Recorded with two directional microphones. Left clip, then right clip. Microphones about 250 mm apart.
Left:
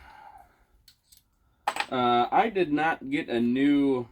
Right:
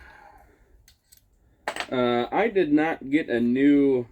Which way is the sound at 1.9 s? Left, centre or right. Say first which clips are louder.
Left 1 dB; left.